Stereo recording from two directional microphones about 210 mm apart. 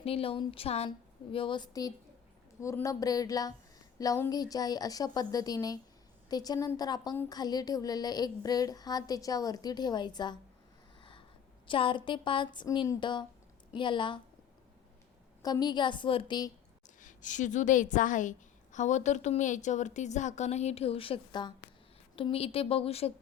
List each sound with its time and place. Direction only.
0.0 s a woman's voice: 25° left (ahead or behind)
11.7 s a woman's voice: 25° left (ahead or behind)
15.4 s a woman's voice: 20° left (ahead or behind)
17.0 s a woman's voice: 35° left (ahead or behind)